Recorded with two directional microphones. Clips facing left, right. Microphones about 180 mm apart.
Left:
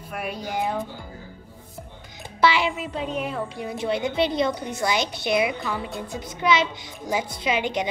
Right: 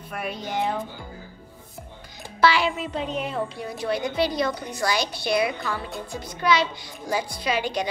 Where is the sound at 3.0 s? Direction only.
5° left (ahead or behind).